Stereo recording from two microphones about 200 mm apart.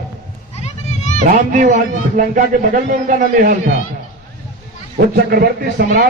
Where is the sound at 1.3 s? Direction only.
40° right (ahead or behind).